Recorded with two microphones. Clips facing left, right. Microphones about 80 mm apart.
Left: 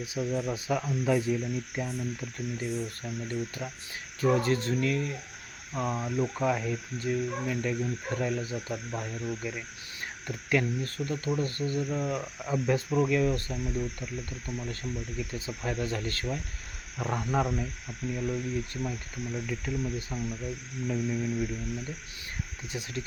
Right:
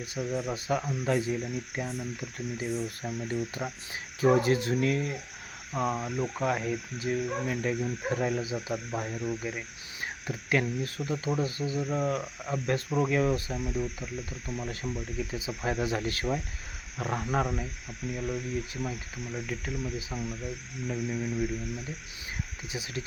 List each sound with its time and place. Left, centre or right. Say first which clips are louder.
0.0 s speech: left 1 dB; centre
3.1 s speech: right 2 dB; centre
12.1 s speech: left 1 dB; centre
13.0 s speech: right 2 dB; centre
22.6 s speech: left 1 dB; centre